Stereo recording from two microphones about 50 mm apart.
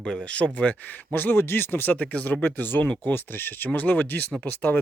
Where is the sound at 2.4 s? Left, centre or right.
Left.